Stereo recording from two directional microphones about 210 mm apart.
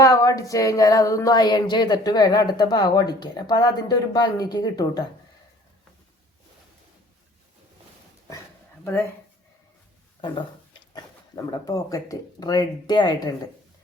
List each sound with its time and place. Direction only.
0.0 s a sound: 15° left (ahead or behind)
8.8 s speech: 10° left (ahead or behind)
10.9 s speech: 20° left (ahead or behind)